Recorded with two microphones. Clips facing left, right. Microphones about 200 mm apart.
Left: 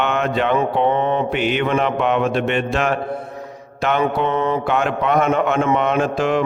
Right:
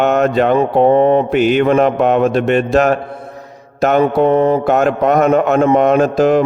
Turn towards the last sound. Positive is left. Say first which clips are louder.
# right 7 dB
turn(degrees=-40)  # may be behind; listen again after turning